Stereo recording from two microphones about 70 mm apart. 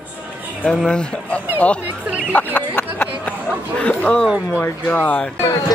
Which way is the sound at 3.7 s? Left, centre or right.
Centre.